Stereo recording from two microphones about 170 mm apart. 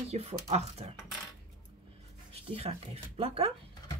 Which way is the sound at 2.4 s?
35° right (ahead or behind).